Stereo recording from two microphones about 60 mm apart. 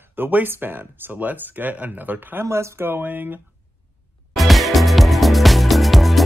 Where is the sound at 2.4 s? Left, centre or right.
Right.